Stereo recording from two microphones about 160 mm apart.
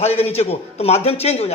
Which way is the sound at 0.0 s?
40° left (ahead or behind).